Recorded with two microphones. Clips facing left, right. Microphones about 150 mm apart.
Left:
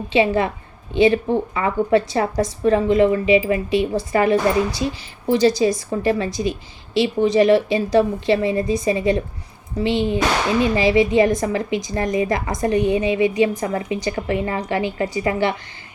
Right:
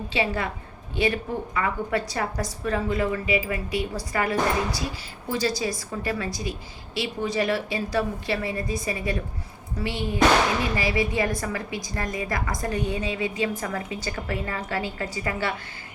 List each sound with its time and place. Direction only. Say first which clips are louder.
0.1 s speech: left 10 dB; 20° left (ahead or behind)